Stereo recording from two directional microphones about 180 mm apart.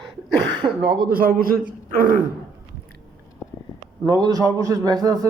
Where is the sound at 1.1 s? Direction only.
55° right (ahead or behind).